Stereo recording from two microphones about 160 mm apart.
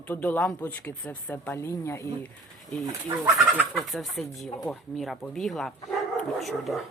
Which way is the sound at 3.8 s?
Centre (ahead or behind).